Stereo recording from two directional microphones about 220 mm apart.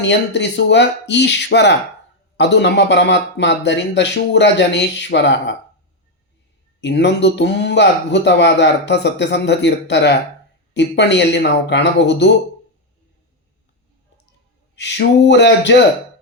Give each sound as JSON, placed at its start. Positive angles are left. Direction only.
{"t": 0.0, "sound": "speech", "side_deg": 50}
{"t": 6.8, "sound": "speech", "side_deg": 50}
{"t": 14.8, "sound": "speech", "side_deg": 50}